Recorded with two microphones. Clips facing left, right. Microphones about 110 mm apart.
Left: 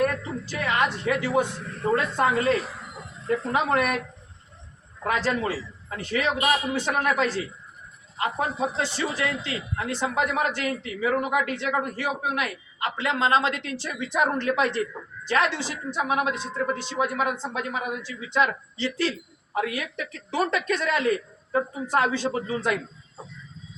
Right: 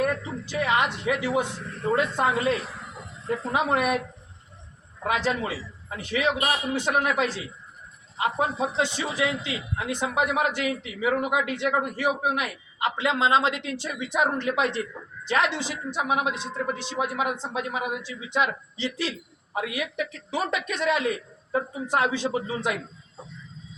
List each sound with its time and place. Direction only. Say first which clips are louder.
0.6 s a woman's voice: right 1 dB; 15° right (ahead or behind)
5.0 s a man's voice: left 1 dB; 15° right (ahead or behind)